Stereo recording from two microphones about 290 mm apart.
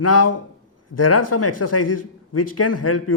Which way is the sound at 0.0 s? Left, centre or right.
Left.